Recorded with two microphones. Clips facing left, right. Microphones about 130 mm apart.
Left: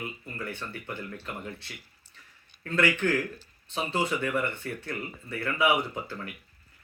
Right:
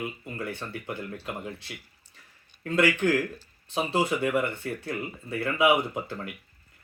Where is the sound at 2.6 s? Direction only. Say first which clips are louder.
Right 3 dB; 10° right (ahead or behind).